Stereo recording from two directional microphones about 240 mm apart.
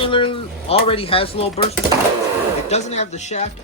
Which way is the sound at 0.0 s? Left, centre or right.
Left.